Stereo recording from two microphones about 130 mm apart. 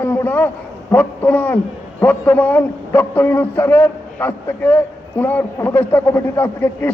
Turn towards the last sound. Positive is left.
turn(degrees=15)  # may be behind; listen again after turning